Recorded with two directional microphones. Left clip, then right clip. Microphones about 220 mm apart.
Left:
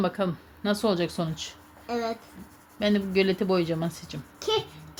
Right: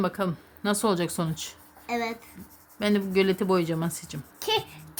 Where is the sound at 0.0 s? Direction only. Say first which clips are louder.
Left 1 dB; 15° right (ahead or behind); by 2.1 s 30° right (ahead or behind).